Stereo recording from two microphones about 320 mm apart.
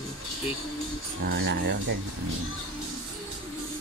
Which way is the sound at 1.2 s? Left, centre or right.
Right.